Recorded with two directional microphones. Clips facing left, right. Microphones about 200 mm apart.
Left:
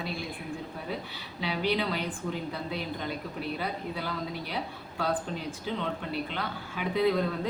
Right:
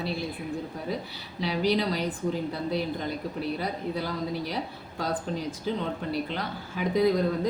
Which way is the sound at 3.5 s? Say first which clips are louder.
Right 3 dB; 40° right (ahead or behind).